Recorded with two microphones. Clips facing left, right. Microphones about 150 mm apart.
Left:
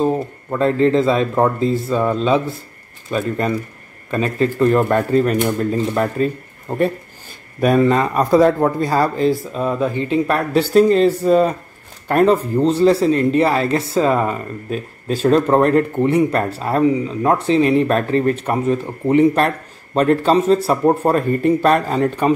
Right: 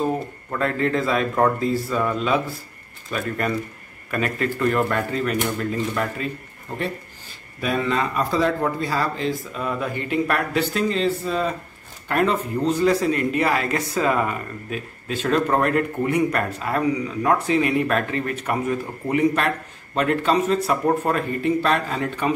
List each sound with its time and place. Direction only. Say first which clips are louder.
0.6 s speech: left 8 dB; 30° left (ahead or behind)
7.6 s speech: left 9 dB; 45° left (ahead or behind)
21.4 s speech: left 6 dB; 45° left (ahead or behind)